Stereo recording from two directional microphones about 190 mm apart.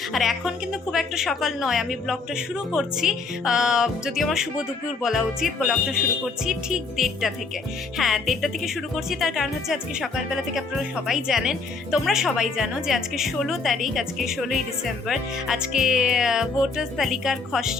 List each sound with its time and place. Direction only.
0.1 s a woman's voice: centre (ahead or behind)